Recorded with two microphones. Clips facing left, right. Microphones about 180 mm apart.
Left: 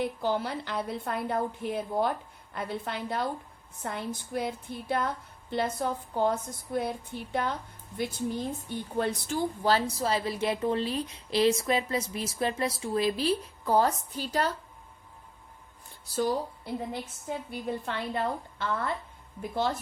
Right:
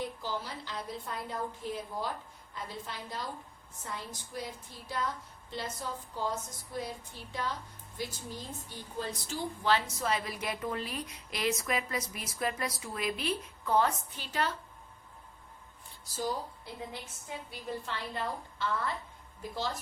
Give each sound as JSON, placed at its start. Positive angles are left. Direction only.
{"t": 0.0, "sound": "a woman's voice", "side_deg": 60}
{"t": 9.6, "sound": "a woman's voice", "side_deg": 35}
{"t": 17.2, "sound": "a woman's voice", "side_deg": 55}